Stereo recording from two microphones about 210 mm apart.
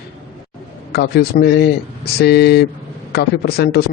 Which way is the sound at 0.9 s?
50° left (ahead or behind).